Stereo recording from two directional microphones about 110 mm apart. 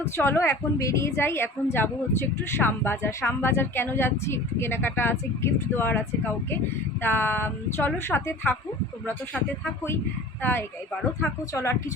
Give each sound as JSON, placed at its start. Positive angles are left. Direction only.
{"t": 0.0, "sound": "a woman's voice", "side_deg": 20}
{"t": 10.4, "sound": "a woman's voice", "side_deg": 20}